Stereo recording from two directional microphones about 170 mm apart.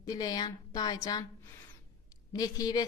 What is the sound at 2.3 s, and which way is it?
Speech, 20° left (ahead or behind).